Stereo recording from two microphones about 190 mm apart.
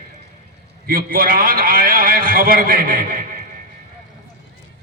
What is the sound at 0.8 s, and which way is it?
A man's voice, 50° right (ahead or behind).